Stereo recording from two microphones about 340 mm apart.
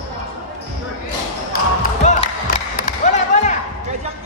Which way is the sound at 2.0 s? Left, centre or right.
Centre.